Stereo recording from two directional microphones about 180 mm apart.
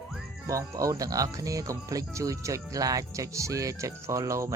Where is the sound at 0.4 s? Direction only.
20° right (ahead or behind).